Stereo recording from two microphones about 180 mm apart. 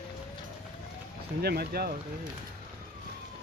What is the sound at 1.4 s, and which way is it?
Speech, 60° right (ahead or behind).